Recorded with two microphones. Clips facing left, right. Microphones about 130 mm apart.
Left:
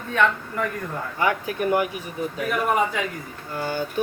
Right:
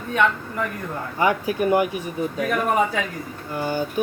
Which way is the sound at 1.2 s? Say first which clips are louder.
Right 3 dB; 20° right (ahead or behind).